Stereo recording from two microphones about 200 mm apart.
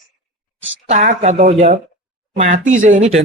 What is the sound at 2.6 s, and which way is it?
Speech, 40° right (ahead or behind).